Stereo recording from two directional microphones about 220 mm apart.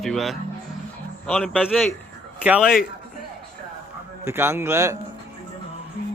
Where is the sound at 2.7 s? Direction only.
40° left (ahead or behind).